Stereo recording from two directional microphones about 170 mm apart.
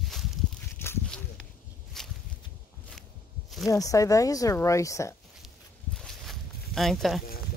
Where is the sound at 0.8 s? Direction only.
15° left (ahead or behind).